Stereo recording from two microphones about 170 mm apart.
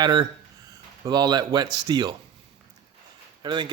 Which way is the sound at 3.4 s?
25° right (ahead or behind).